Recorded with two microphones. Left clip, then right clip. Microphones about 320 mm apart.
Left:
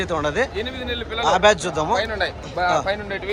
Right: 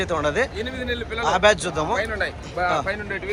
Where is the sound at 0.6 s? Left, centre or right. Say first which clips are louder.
Even; centre.